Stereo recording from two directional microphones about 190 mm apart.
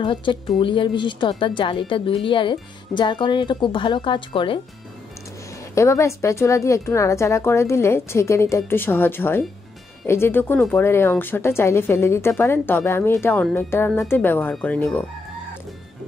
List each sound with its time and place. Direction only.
0.0 s speech: 25° left (ahead or behind)
5.8 s a woman's voice: 15° left (ahead or behind)